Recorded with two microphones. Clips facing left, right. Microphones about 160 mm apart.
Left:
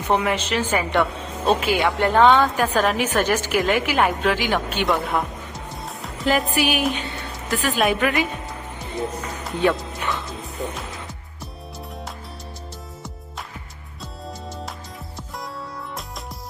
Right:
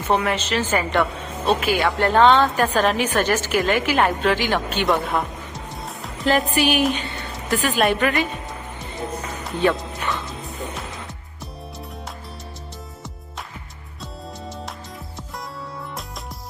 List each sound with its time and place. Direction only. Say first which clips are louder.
0.1 s a woman's voice: even; 15° left (ahead or behind)
1.6 s a woman's voice: even; 20° left (ahead or behind); by 8.3 s 5° left (ahead or behind)
9.5 s music: even; centre (ahead or behind)